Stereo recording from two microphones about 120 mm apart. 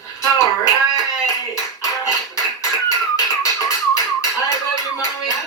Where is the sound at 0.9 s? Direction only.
25° left (ahead or behind).